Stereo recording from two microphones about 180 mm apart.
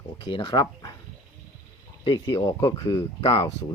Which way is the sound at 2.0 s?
25° left (ahead or behind).